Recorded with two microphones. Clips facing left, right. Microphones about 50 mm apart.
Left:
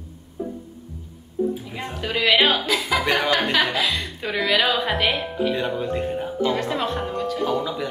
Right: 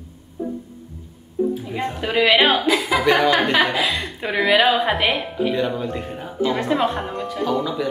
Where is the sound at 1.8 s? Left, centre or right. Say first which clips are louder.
Right 6 dB; centre.